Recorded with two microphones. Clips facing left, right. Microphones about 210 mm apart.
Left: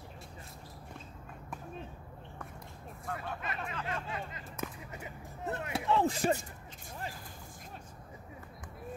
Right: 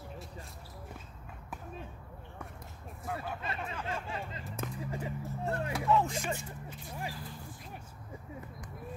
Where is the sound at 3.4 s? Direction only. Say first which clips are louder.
Right 1 dB; 30° right (ahead or behind).